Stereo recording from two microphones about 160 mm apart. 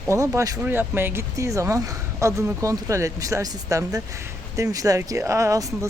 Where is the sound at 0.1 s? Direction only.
20° right (ahead or behind).